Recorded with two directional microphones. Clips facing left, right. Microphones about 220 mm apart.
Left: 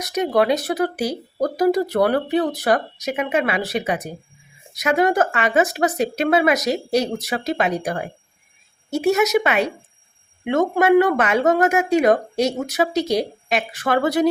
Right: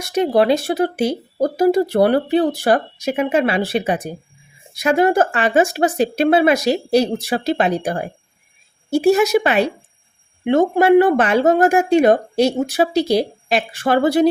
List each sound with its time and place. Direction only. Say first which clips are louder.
0.0 s speech: right 3 dB; 30° right (ahead or behind)